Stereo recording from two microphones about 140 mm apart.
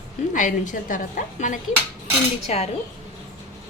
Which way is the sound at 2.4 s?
50° left (ahead or behind).